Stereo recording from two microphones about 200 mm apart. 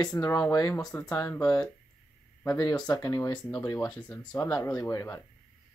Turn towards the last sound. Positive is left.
turn(degrees=15)  # may be behind; listen again after turning